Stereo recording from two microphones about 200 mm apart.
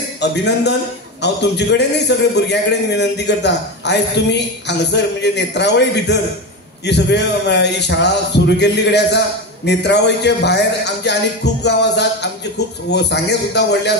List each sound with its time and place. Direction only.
0.2 s a man's voice: 60° left (ahead or behind)